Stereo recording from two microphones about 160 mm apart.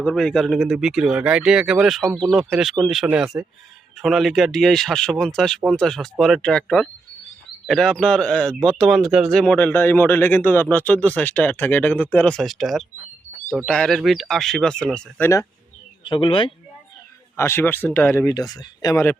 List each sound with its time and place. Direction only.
0.0 s a man's voice: 5° left (ahead or behind)
16.0 s speech: 30° left (ahead or behind)
17.3 s a man's voice: 15° left (ahead or behind)